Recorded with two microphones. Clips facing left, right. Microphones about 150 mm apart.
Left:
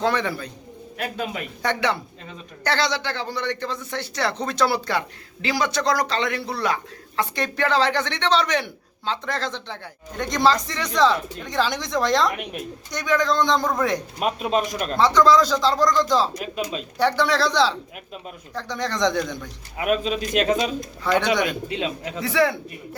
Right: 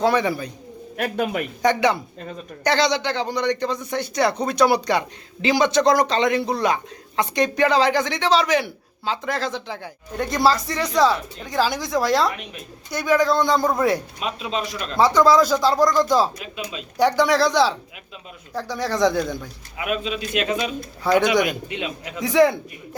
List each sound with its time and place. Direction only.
0.0 s a man's voice: 10° right (ahead or behind)
0.9 s a man's voice: 55° right (ahead or behind)
1.6 s a man's voice: 15° right (ahead or behind)
14.2 s speech: 50° left (ahead or behind)
14.9 s a man's voice: 10° right (ahead or behind)
16.4 s speech: 40° left (ahead or behind)
17.0 s a man's voice: 15° right (ahead or behind)
19.7 s speech: 40° left (ahead or behind)
21.0 s a man's voice: 10° right (ahead or behind)
21.7 s speech: 35° left (ahead or behind)
22.2 s a man's voice: 15° right (ahead or behind)